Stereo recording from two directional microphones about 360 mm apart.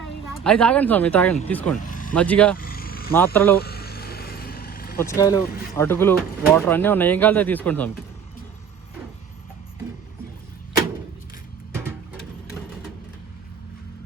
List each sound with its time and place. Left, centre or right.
0.4 s speech: centre
1.8 s vehicle: left
2.1 s speech: centre
2.6 s a sound: left
3.3 s speech: centre
3.6 s vehicle: left
5.0 s speech: centre